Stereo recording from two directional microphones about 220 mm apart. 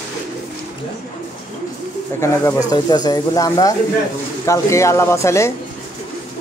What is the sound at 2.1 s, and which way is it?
A man's voice, 15° left (ahead or behind).